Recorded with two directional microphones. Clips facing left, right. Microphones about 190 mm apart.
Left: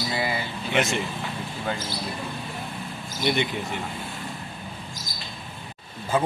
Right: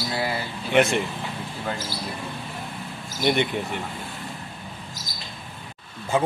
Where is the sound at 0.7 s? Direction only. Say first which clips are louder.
Right 5 dB; 55° right (ahead or behind).